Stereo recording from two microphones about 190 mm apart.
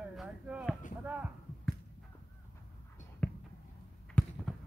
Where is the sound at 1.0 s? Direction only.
10° right (ahead or behind).